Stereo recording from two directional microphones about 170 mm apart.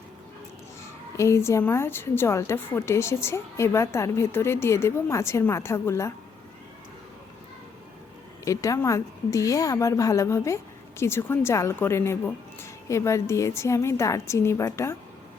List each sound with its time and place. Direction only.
1.1 s a woman's voice: 15° left (ahead or behind)
8.4 s a woman's voice: 20° left (ahead or behind)